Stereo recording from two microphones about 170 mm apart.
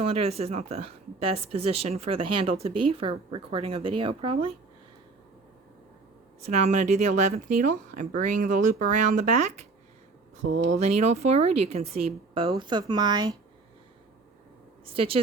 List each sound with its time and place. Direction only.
0.0 s a woman's voice: 35° right (ahead or behind)
6.4 s a woman's voice: 40° right (ahead or behind); by 13.3 s 25° right (ahead or behind)
14.8 s a woman's voice: 35° right (ahead or behind)